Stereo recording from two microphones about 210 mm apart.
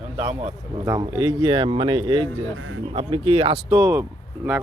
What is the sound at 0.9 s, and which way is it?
Speech, 20° right (ahead or behind).